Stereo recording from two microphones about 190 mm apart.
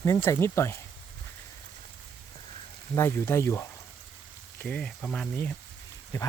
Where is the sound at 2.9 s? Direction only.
15° left (ahead or behind).